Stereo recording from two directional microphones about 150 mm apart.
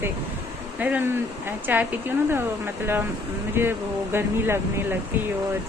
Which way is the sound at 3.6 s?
15° right (ahead or behind).